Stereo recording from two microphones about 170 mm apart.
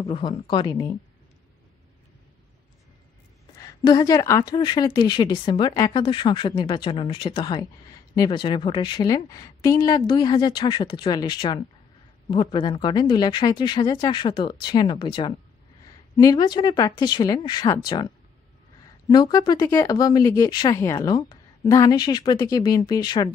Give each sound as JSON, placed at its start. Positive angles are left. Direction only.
{"t": 0.0, "sound": "speech", "side_deg": 30}
{"t": 3.5, "sound": "speech", "side_deg": 20}